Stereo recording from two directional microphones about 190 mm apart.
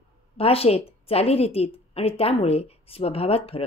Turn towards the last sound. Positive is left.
turn(degrees=30)  # may be behind; listen again after turning